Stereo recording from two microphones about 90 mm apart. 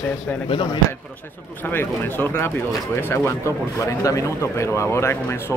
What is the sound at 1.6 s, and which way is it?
Speech, 20° left (ahead or behind).